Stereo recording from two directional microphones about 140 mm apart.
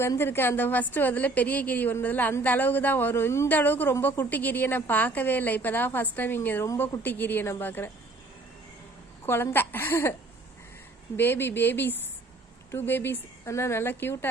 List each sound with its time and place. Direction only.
0.0 s a woman's voice: 15° left (ahead or behind)
9.2 s a woman's voice: 15° left (ahead or behind)
11.2 s a woman's voice: 15° left (ahead or behind)